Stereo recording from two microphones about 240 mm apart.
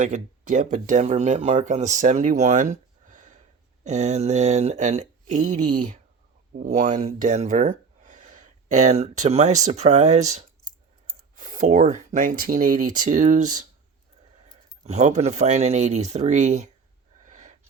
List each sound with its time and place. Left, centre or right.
0.0 s speech: right
14.8 s speech: right
17.2 s wheeze: right